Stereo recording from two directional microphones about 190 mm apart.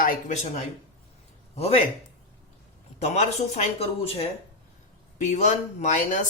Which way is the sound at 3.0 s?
35° left (ahead or behind).